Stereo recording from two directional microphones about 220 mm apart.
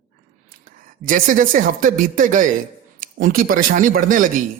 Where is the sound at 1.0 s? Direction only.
35° right (ahead or behind).